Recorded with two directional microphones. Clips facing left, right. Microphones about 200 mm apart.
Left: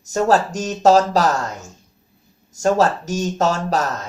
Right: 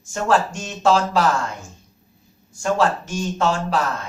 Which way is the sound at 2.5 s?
40° left (ahead or behind).